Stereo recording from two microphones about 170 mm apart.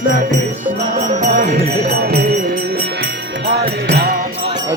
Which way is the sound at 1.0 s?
45° right (ahead or behind).